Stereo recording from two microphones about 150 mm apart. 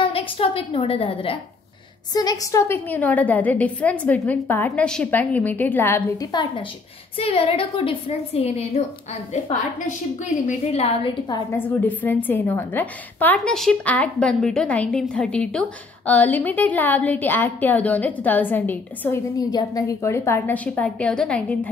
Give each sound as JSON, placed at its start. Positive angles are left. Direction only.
{"t": 0.0, "sound": "a woman's voice", "side_deg": 35}
{"t": 2.1, "sound": "a woman's voice", "side_deg": 25}
{"t": 7.2, "sound": "a woman's voice", "side_deg": 40}
{"t": 9.3, "sound": "a woman's voice", "side_deg": 55}
{"t": 11.5, "sound": "a woman's voice", "side_deg": 10}
{"t": 19.3, "sound": "a woman's voice", "side_deg": 25}